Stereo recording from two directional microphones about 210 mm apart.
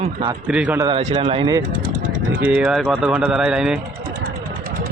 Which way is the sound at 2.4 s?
5° right (ahead or behind).